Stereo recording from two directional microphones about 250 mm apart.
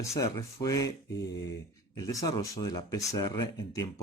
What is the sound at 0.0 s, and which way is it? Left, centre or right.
Speech, centre.